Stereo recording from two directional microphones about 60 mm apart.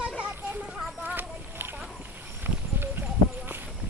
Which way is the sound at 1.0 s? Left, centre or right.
Right.